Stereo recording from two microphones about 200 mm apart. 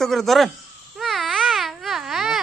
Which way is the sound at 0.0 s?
Centre (ahead or behind).